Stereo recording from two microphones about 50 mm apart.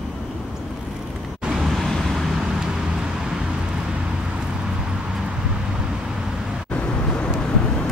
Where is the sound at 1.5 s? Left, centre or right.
Centre.